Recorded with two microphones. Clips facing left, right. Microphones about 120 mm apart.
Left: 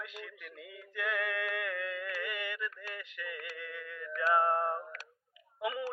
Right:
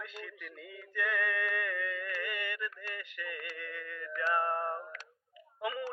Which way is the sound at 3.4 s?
10° left (ahead or behind).